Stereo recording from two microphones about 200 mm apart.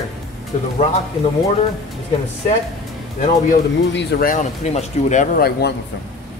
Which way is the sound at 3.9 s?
60° left (ahead or behind).